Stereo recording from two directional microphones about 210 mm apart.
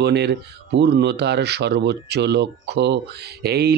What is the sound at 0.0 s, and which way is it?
Speech, 55° right (ahead or behind).